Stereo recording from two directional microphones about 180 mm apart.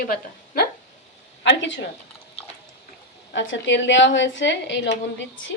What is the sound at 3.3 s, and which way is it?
A woman's voice, 90° left.